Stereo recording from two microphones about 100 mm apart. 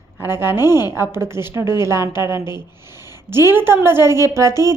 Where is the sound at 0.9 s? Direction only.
25° right (ahead or behind).